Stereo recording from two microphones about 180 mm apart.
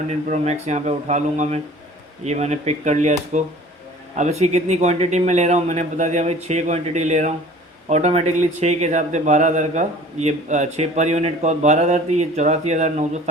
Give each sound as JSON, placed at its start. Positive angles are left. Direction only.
{"t": 0.1, "sound": "speech", "side_deg": -40}